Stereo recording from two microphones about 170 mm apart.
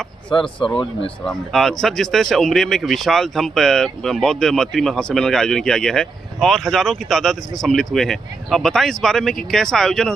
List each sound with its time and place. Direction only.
0.3 s speech: 30° left (ahead or behind)
1.2 s speech: centre (ahead or behind)